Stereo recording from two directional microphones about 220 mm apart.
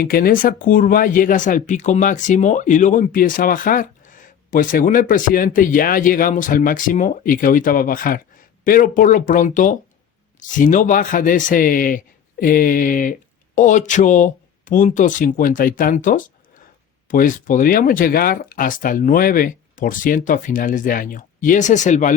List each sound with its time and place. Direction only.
0.0 s speech: 40° left (ahead or behind)